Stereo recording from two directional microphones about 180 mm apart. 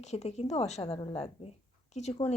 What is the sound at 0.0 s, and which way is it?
Speech, 35° left (ahead or behind).